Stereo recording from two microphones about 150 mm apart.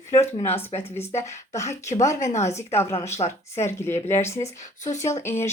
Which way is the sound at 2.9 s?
45° left (ahead or behind).